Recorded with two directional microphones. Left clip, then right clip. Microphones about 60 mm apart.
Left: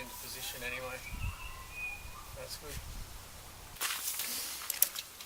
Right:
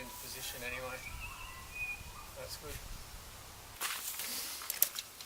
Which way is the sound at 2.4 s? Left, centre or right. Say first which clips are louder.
Left 1 dB; centre.